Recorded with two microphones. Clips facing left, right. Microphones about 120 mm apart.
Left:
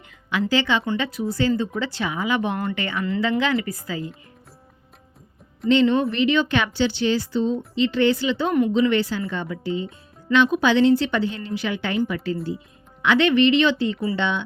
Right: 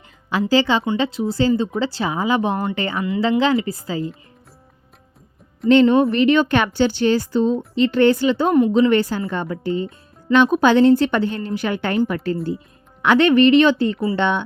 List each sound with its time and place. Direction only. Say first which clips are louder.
0.3 s speech: right 4 dB; 35° right (ahead or behind)
5.8 s a woman's voice: right 5 dB; 50° right (ahead or behind)